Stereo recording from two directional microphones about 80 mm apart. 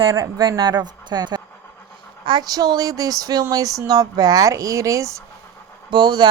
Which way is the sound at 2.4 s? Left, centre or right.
Right.